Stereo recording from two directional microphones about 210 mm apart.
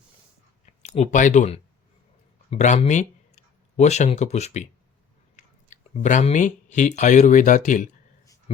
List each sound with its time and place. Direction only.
0.6 s speech: 30° left (ahead or behind)
5.4 s chewing: 35° left (ahead or behind)
5.7 s speech: 35° left (ahead or behind)